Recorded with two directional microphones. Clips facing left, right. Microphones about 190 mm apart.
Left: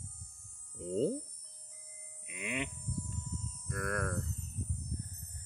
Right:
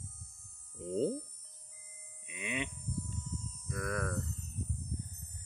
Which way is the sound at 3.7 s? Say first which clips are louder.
Even; centre (ahead or behind).